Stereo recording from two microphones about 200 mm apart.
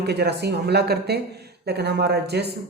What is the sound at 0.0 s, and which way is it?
Speech, 55° right (ahead or behind).